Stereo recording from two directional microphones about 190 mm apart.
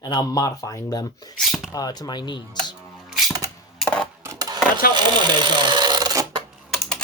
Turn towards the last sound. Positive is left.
turn(degrees=5)  # may be behind; listen again after turning